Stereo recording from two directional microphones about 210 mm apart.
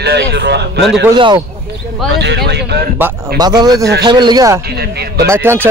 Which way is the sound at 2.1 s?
55° right (ahead or behind).